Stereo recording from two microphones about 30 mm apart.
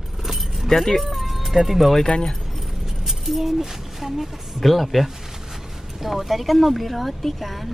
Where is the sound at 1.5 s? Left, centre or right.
Centre.